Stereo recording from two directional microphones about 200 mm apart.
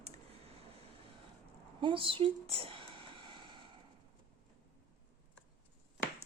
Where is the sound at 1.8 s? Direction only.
25° right (ahead or behind).